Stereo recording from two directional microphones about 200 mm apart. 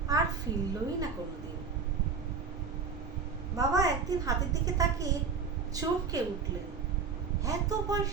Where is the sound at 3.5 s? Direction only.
15° right (ahead or behind).